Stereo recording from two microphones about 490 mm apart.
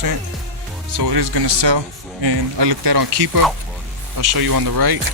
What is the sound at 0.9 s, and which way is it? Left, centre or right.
Speech, right.